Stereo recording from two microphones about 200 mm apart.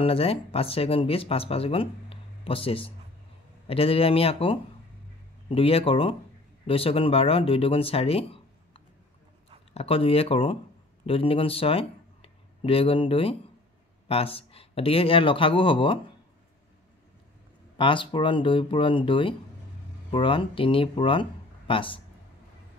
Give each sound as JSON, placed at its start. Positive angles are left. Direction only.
{"t": 0.0, "sound": "speech", "side_deg": 30}
{"t": 9.8, "sound": "speech", "side_deg": 30}
{"t": 17.7, "sound": "speech", "side_deg": 25}